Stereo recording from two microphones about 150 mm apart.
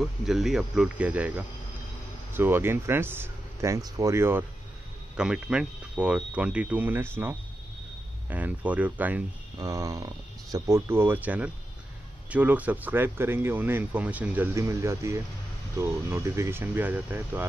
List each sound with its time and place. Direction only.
0.0 s speech: centre (ahead or behind)
9.6 s speech: 25° right (ahead or behind)